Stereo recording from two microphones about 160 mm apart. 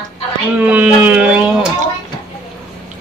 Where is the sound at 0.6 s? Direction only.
10° right (ahead or behind).